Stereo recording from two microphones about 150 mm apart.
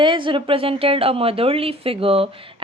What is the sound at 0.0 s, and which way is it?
Speech, 35° right (ahead or behind).